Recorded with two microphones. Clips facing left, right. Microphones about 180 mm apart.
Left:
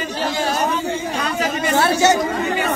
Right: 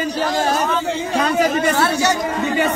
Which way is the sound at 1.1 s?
45° right (ahead or behind).